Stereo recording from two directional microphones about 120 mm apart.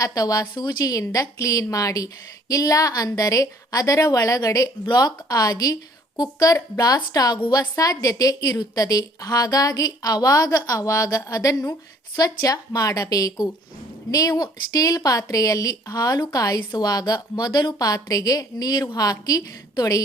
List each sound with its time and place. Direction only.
0.0 s a woman's voice: 30° left (ahead or behind)